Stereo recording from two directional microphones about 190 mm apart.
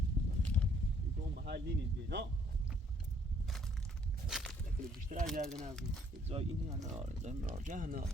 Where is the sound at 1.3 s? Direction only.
60° right (ahead or behind).